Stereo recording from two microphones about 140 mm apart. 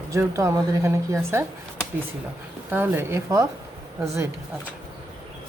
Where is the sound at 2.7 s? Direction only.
15° right (ahead or behind).